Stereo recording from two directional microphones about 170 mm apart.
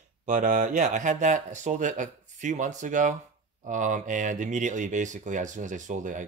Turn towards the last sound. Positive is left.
turn(degrees=-50)  # may be behind; listen again after turning